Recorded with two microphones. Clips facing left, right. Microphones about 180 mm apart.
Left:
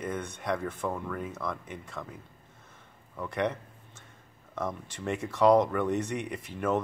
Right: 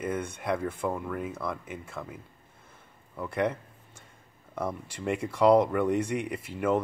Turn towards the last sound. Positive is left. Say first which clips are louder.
# right 2 dB
turn(degrees=-10)  # may be behind; listen again after turning